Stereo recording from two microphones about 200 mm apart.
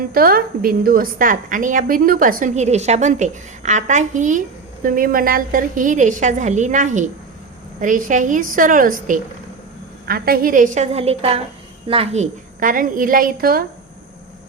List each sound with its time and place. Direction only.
0.1 s a woman's voice: 45° right (ahead or behind)